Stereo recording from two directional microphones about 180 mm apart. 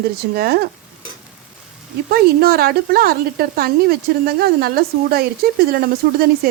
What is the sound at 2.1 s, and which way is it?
Speech, 60° right (ahead or behind).